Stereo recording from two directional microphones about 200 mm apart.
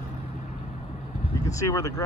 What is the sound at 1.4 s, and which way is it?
Speech, 15° left (ahead or behind).